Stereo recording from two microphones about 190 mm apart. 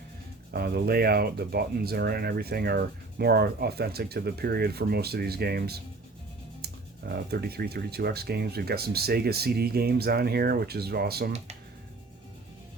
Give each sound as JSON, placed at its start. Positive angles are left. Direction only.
{"t": 0.5, "sound": "speech", "side_deg": -55}